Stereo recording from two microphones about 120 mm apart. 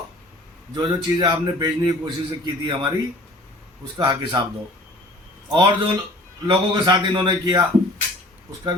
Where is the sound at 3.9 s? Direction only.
40° right (ahead or behind).